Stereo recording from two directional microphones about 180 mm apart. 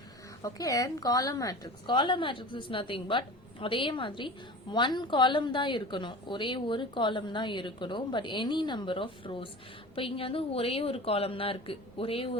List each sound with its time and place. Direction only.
0.4 s a woman's voice: 20° left (ahead or behind)